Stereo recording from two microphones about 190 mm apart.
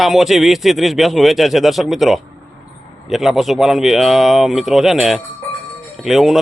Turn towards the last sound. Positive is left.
turn(degrees=0)  # may be behind; listen again after turning